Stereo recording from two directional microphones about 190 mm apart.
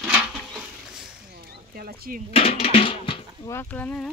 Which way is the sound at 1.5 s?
55° right (ahead or behind).